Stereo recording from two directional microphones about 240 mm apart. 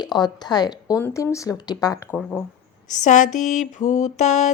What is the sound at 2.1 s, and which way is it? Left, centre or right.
Speech, centre.